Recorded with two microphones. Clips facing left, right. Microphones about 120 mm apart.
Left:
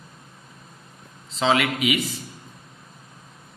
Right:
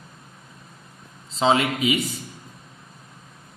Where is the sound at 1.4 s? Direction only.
30° right (ahead or behind).